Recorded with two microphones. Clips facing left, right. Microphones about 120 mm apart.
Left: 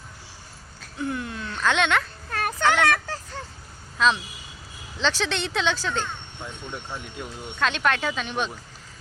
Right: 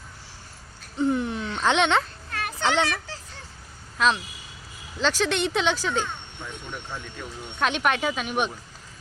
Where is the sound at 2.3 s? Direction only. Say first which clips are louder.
Left 4 dB; 45° left (ahead or behind).